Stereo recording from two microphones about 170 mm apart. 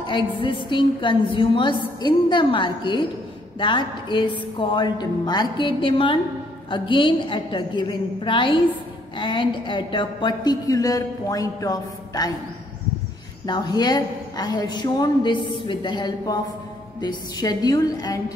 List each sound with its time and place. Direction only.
0.0 s a woman's voice: 30° left (ahead or behind)
13.5 s a woman's voice: 25° left (ahead or behind)